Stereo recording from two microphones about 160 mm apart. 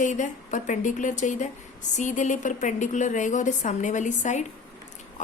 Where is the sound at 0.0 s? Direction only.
50° left (ahead or behind).